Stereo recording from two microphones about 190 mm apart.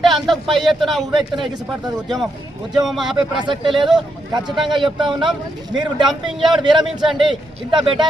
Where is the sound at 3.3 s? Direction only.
25° right (ahead or behind).